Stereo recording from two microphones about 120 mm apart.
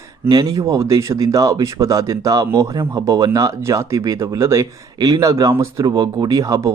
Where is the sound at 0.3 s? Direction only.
30° right (ahead or behind).